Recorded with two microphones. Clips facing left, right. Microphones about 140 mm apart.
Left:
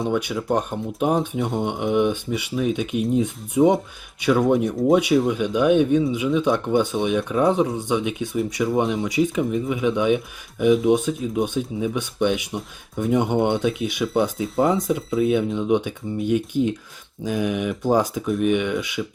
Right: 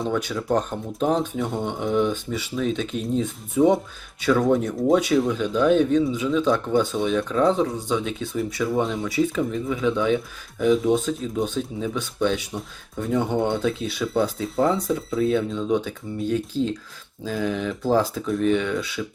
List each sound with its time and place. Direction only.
0.1 s speech: 15° left (ahead or behind)